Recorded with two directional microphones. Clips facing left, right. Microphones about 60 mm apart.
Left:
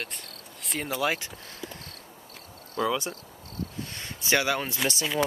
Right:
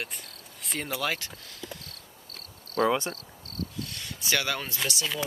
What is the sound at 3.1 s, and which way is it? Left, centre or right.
Cricket, left.